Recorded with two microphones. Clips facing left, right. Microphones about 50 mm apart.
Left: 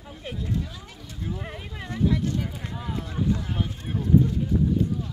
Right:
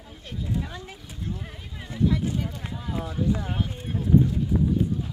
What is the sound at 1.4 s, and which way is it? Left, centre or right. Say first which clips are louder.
Speech: left 4 dB; left.